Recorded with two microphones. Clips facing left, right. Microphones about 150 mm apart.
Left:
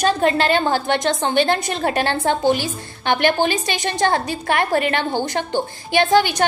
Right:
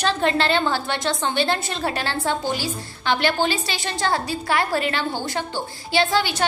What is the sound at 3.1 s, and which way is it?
Speech, 50° left (ahead or behind).